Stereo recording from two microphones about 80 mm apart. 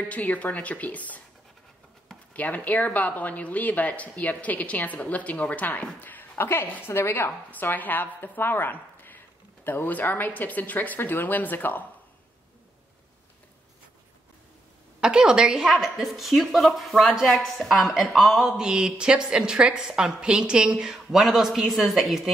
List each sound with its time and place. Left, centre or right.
0.1 s speech: centre
2.3 s speech: centre
15.0 s a woman's voice: centre